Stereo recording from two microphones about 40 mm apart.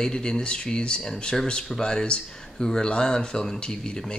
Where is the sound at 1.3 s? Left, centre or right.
Centre.